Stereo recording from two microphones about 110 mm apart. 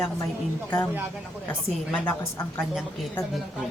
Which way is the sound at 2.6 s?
5° right (ahead or behind).